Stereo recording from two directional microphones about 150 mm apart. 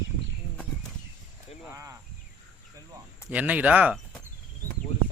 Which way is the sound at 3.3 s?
10° right (ahead or behind).